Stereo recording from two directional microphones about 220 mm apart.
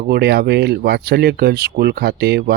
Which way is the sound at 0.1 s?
45° right (ahead or behind).